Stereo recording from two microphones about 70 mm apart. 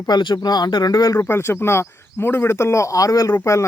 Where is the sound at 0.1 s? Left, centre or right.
Left.